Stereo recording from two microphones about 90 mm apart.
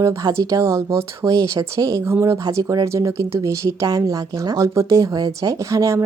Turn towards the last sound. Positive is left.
turn(degrees=-35)  # may be behind; listen again after turning